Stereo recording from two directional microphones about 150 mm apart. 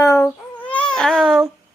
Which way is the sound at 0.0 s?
20° left (ahead or behind).